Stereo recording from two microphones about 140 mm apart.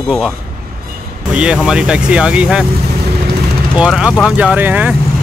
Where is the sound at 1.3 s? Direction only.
5° right (ahead or behind).